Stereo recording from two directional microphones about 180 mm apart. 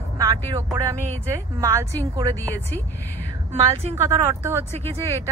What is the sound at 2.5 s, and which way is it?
Speech, 10° left (ahead or behind).